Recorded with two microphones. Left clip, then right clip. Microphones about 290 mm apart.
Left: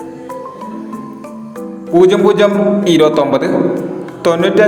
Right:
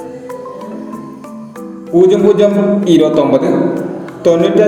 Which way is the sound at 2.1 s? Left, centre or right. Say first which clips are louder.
Right 1 dB; left.